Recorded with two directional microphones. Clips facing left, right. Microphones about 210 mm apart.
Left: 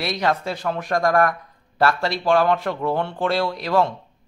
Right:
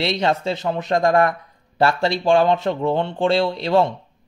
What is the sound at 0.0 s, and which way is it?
Speech, 25° right (ahead or behind).